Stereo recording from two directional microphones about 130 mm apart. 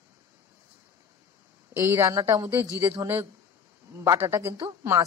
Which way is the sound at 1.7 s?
20° right (ahead or behind).